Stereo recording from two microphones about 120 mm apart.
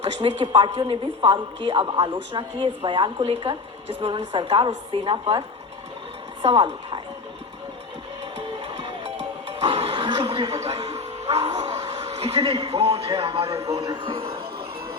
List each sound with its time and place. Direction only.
0.0 s a woman's voice: 50° right (ahead or behind)
6.4 s a woman's voice: 45° right (ahead or behind)
8.4 s music: 40° right (ahead or behind)
9.5 s television: 50° right (ahead or behind)
13.1 s a woman's voice: 50° right (ahead or behind)
13.4 s speech: 25° right (ahead or behind)
14.0 s a woman's voice: 45° right (ahead or behind)